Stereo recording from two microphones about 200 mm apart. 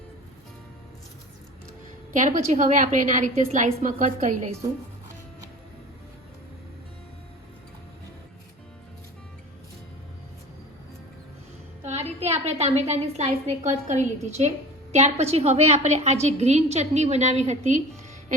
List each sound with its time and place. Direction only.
2.1 s a woman's voice: 40° right (ahead or behind)
11.8 s a woman's voice: 35° right (ahead or behind)